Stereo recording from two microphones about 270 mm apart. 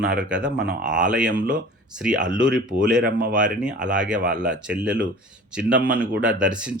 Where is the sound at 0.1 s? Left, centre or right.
Centre.